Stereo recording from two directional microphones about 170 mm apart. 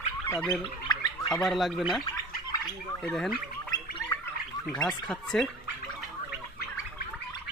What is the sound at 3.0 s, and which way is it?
Speech, centre (ahead or behind).